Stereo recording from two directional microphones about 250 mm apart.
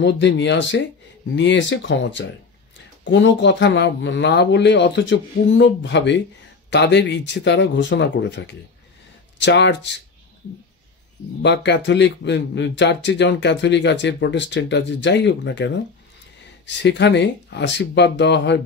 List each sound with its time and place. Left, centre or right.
0.0 s speech: left
11.4 s speech: left